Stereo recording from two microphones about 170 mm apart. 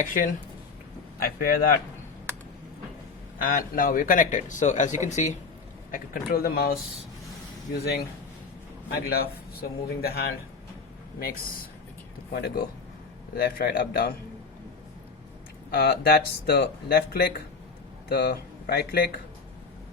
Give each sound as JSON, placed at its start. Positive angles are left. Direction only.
{"t": 0.0, "sound": "speech", "side_deg": 50}
{"t": 3.4, "sound": "speech", "side_deg": 55}
{"t": 5.9, "sound": "speech", "side_deg": 60}
{"t": 9.0, "sound": "speech", "side_deg": 65}
{"t": 12.3, "sound": "speech", "side_deg": 70}
{"t": 15.7, "sound": "speech", "side_deg": 65}